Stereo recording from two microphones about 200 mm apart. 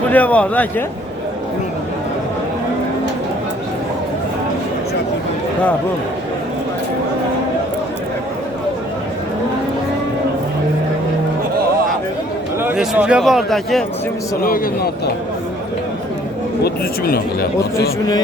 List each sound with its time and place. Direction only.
0.1 s speech: 5° left (ahead or behind)
12.6 s a man's voice: 5° right (ahead or behind)
14.4 s speech: 45° left (ahead or behind)
16.6 s speech: 50° left (ahead or behind)